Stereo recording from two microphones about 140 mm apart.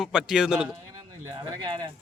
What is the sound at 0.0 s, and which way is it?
Speech, 5° right (ahead or behind).